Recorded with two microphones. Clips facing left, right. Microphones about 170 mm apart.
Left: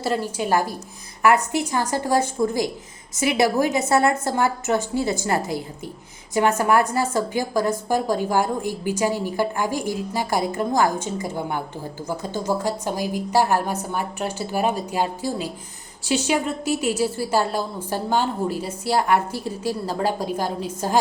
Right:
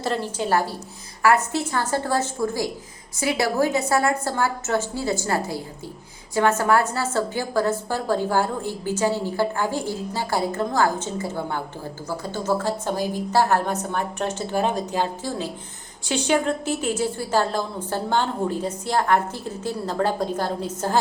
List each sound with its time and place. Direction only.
0.0 s a woman's voice: 10° left (ahead or behind)